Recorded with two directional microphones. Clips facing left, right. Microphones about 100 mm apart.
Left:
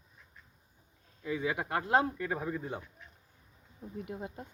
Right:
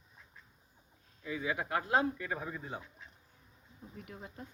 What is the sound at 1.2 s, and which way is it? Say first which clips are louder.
Speech: left 4 dB; 55° left (ahead or behind).